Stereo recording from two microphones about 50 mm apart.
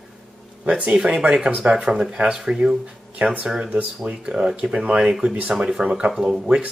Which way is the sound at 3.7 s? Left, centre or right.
Right.